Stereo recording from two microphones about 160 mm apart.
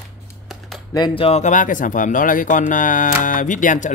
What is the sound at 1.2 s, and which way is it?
Speech, 45° left (ahead or behind).